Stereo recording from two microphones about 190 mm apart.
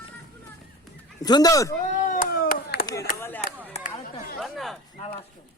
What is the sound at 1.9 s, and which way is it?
Speech, 45° left (ahead or behind).